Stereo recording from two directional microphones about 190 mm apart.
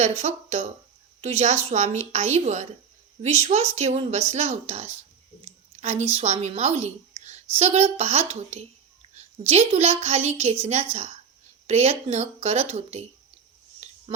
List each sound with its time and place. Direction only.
0.0 s a woman's voice: 35° right (ahead or behind)